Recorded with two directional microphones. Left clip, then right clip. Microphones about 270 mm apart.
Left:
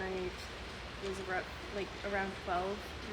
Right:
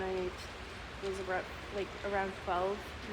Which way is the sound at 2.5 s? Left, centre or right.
Centre.